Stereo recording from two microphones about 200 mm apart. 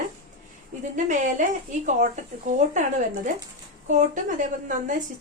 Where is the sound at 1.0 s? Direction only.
40° right (ahead or behind).